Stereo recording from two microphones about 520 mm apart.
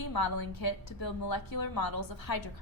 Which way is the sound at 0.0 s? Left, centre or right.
Left.